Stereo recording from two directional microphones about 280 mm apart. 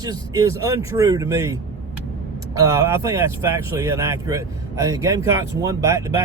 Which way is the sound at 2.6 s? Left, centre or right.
Centre.